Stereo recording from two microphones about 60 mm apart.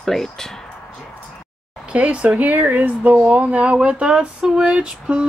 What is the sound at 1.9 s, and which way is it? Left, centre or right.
Speech, centre.